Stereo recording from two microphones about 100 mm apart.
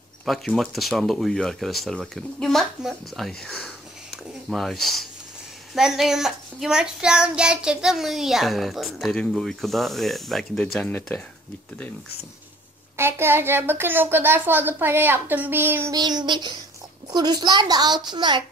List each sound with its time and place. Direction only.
0.5 s child singing: centre (ahead or behind)
2.8 s speech: centre (ahead or behind)
5.8 s child singing: 5° right (ahead or behind)
10.8 s speech: 15° left (ahead or behind)
12.9 s a woman's voice: 25° right (ahead or behind)
15.9 s a woman's voice: 45° right (ahead or behind)